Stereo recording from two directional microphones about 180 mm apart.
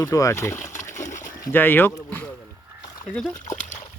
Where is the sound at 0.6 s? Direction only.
45° left (ahead or behind).